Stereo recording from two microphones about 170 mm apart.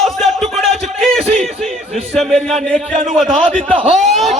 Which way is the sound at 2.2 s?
Centre (ahead or behind).